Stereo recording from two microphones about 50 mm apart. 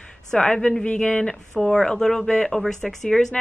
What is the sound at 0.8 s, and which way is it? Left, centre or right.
Speech, left.